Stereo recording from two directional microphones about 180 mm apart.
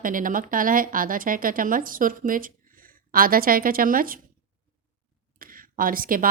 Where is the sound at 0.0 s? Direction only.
50° right (ahead or behind).